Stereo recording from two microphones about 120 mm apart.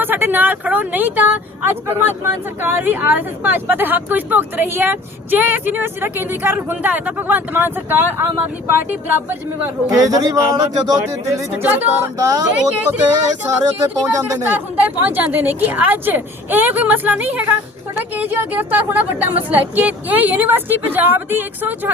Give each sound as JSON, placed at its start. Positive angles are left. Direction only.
{"t": 0.0, "sound": "speech", "side_deg": -15}
{"t": 9.3, "sound": "a man's voice", "side_deg": -20}
{"t": 10.0, "sound": "a man's voice", "side_deg": -30}
{"t": 11.6, "sound": "speech", "side_deg": -15}
{"t": 12.1, "sound": "a man's voice", "side_deg": -30}
{"t": 13.5, "sound": "a man's voice", "side_deg": -30}
{"t": 14.5, "sound": "speech", "side_deg": -15}